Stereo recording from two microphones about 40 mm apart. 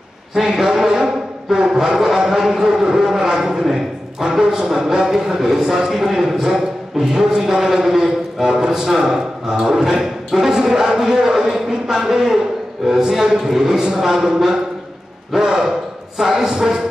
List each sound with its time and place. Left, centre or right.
0.3 s chant: centre
0.7 s speech: centre